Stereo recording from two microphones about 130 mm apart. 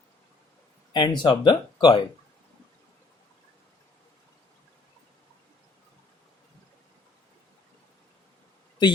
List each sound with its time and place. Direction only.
0.9 s speech: 35° left (ahead or behind)